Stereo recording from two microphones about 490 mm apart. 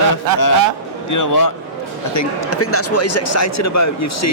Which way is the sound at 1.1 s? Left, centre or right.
Left.